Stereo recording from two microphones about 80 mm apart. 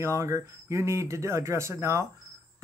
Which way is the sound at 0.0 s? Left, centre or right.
Right.